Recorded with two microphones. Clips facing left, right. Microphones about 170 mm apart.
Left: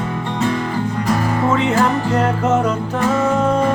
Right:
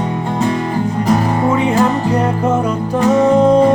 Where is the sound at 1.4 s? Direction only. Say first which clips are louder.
Right 3 dB; 15° right (ahead or behind).